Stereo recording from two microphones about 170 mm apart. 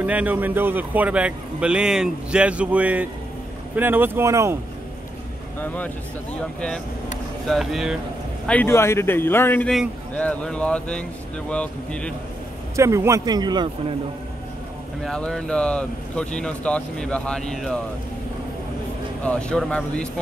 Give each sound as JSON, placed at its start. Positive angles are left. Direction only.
{"t": 0.0, "sound": "a man's voice", "side_deg": -10}
{"t": 7.4, "sound": "speech", "side_deg": 0}
{"t": 8.5, "sound": "speech", "side_deg": 10}
{"t": 12.7, "sound": "speech", "side_deg": -15}
{"t": 15.0, "sound": "speech", "side_deg": 5}
{"t": 19.2, "sound": "speech", "side_deg": 5}